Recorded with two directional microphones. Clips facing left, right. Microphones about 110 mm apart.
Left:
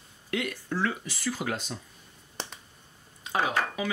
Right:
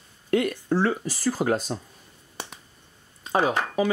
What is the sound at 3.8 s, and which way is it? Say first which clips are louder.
Speech: right 8 dB; 40° right (ahead or behind).